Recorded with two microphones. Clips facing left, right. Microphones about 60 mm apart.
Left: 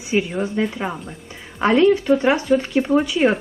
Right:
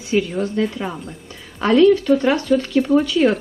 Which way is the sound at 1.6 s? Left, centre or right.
Left.